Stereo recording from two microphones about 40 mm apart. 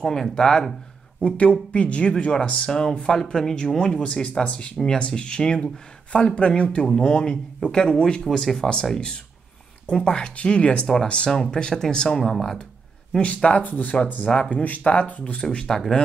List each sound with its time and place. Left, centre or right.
0.0 s speech: centre
1.2 s speech: left
4.0 s speech: left
12.2 s speech: centre
13.2 s speech: left
14.2 s speech: left
14.5 s speech: left
15.7 s speech: centre